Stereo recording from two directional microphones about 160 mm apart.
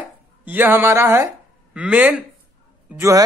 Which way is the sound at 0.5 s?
10° right (ahead or behind).